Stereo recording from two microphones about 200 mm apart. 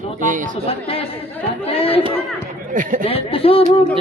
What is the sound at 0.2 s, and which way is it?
Speech, 40° right (ahead or behind).